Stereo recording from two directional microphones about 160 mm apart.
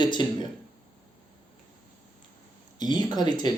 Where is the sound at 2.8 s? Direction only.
25° left (ahead or behind).